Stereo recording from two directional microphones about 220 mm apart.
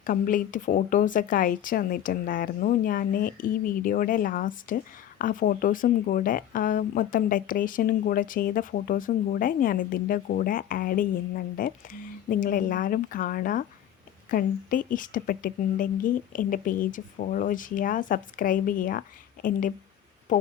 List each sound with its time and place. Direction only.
0.0 s speech: 40° left (ahead or behind)